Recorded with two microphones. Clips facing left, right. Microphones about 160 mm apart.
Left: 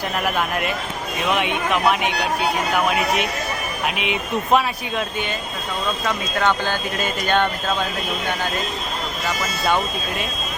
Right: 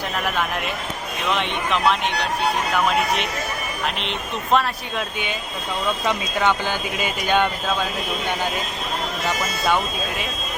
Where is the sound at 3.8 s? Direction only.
10° left (ahead or behind).